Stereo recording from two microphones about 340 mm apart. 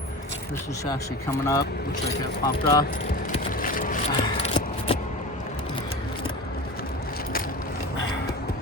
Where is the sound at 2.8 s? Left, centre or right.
Left.